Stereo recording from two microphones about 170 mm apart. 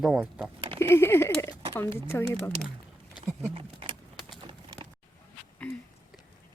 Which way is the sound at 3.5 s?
35° right (ahead or behind).